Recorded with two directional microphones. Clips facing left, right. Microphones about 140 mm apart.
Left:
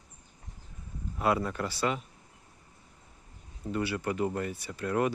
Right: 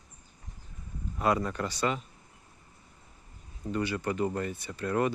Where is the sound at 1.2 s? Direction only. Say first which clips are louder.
Even; 5° left (ahead or behind).